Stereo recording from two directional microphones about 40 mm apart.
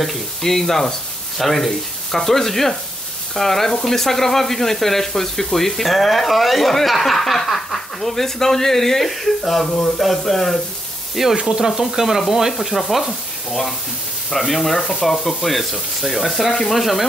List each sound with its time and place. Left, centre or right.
0.0 s frying: centre
3.8 s speech: centre
11.3 s frying: centre
12.7 s speech: centre
13.5 s frying: centre
14.3 s speech: centre